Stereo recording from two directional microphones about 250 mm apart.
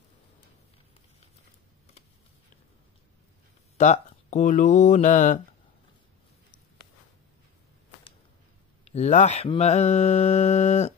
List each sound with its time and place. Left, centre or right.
3.7 s mantra: left
8.8 s mantra: left